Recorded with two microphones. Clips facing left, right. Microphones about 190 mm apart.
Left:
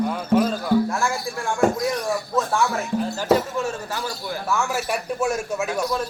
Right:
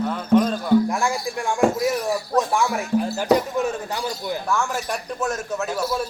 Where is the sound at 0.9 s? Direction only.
15° right (ahead or behind).